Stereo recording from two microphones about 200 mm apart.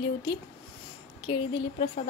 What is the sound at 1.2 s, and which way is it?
Speech, 30° left (ahead or behind).